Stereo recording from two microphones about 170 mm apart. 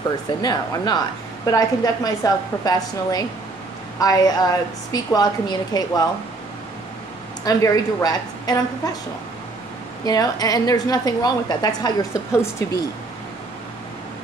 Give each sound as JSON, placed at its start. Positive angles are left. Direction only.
{"t": 0.4, "sound": "a woman's voice", "side_deg": 25}
{"t": 7.4, "sound": "a woman's voice", "side_deg": 20}
{"t": 10.0, "sound": "a woman's voice", "side_deg": 20}